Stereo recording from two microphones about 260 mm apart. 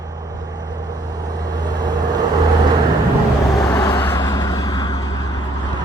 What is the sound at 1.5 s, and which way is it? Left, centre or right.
Vehicle, centre.